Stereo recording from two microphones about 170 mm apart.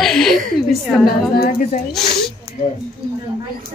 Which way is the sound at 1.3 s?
55° left (ahead or behind).